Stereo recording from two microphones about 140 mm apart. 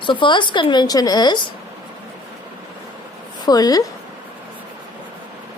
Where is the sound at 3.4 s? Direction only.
30° left (ahead or behind).